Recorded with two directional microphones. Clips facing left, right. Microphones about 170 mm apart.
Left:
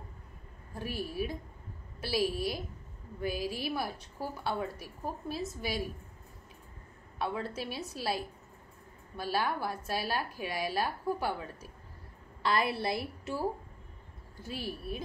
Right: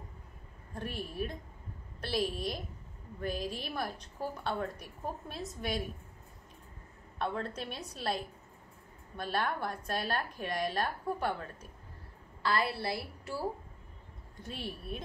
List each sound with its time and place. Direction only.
0.7 s a woman's voice: 5° left (ahead or behind)
7.2 s a woman's voice: 5° left (ahead or behind)
12.4 s a woman's voice: 20° left (ahead or behind)
14.3 s a woman's voice: 5° left (ahead or behind)